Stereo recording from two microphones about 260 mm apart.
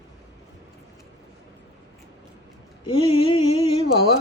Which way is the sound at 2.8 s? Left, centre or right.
Centre.